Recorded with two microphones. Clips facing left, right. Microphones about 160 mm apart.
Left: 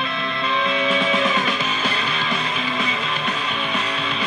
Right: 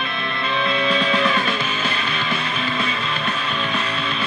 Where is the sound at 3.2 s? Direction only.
15° left (ahead or behind).